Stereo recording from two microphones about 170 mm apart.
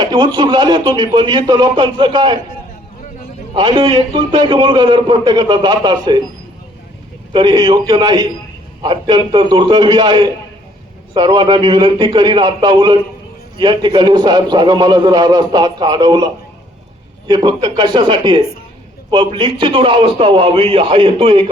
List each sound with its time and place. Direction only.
0.0 s a man's voice: 25° right (ahead or behind)
3.6 s a man's voice: 30° right (ahead or behind)
7.3 s a man's voice: 25° right (ahead or behind)